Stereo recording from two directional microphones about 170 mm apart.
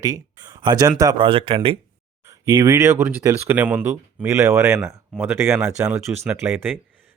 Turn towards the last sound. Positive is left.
turn(degrees=-15)  # may be behind; listen again after turning